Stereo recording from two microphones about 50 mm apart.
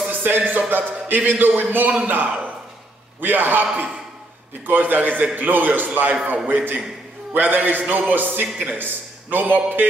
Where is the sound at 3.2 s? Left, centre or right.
Right.